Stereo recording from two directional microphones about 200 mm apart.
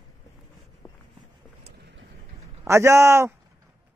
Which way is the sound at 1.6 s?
60° right (ahead or behind).